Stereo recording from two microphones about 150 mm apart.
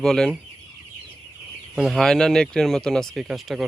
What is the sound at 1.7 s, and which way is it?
Speech, centre (ahead or behind).